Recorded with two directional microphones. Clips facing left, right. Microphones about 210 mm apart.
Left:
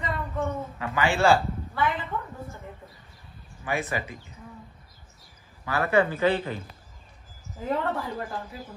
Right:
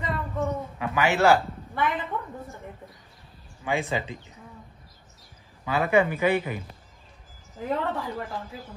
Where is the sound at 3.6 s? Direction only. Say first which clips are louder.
Right 2 dB; 15° right (ahead or behind).